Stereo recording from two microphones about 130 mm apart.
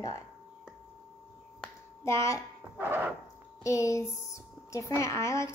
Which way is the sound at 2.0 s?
20° left (ahead or behind).